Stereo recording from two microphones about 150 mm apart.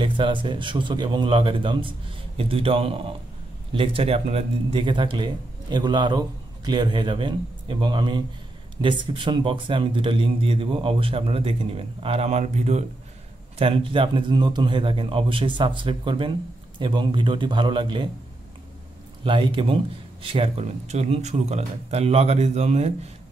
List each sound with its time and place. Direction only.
0.0 s a man's voice: 35° right (ahead or behind)
13.6 s a man's voice: 35° right (ahead or behind)
19.2 s a man's voice: 35° right (ahead or behind)